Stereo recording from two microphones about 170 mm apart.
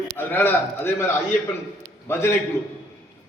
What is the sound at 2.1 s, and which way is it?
Speech, 15° left (ahead or behind).